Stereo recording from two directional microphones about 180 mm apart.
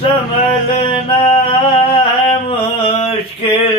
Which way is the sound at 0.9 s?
30° left (ahead or behind).